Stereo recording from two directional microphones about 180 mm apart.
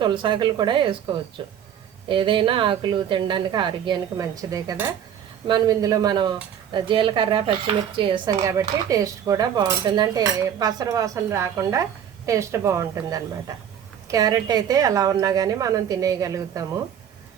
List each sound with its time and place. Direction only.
0.0 s speech: 25° right (ahead or behind)